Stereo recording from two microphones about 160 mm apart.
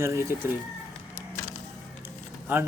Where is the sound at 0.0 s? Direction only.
15° right (ahead or behind).